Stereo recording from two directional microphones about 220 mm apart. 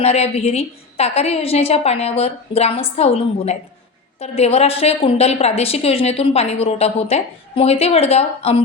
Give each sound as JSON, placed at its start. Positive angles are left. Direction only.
{"t": 0.0, "sound": "a woman's voice", "side_deg": 30}